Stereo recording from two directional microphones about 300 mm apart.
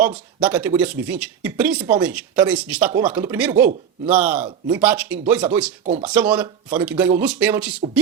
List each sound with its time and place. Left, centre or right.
0.3 s speech: centre
5.8 s speech: right
6.1 s speech: centre